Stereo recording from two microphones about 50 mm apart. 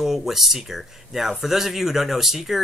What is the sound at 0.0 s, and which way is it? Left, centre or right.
Speech, centre.